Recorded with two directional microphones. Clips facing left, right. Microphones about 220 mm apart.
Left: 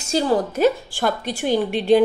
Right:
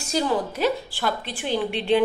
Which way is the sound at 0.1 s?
40° left (ahead or behind).